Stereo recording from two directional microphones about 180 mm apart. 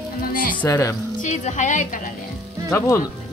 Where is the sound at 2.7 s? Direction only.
15° left (ahead or behind).